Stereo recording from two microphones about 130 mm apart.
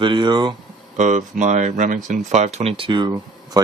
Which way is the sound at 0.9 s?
65° right (ahead or behind).